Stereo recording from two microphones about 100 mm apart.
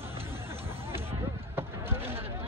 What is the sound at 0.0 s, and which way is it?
Hubbub, 25° right (ahead or behind).